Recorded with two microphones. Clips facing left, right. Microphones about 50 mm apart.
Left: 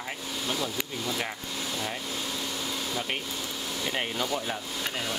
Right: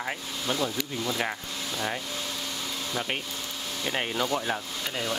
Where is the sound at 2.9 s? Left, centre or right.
Centre.